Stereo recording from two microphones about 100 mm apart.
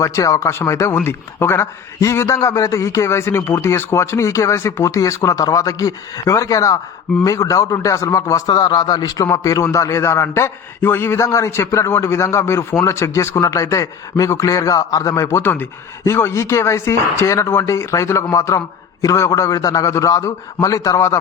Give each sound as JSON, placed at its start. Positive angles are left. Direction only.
{"t": 0.0, "sound": "a man's voice", "side_deg": 30}
{"t": 8.5, "sound": "a man's voice", "side_deg": 45}